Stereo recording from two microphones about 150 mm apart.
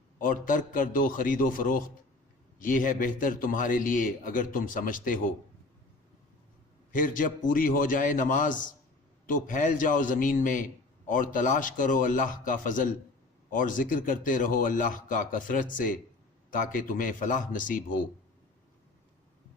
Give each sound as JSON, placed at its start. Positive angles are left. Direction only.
{"t": 0.2, "sound": "a man's voice", "side_deg": 65}
{"t": 6.9, "sound": "a man's voice", "side_deg": 65}